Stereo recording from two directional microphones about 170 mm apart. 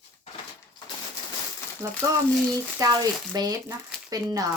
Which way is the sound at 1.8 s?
20° right (ahead or behind).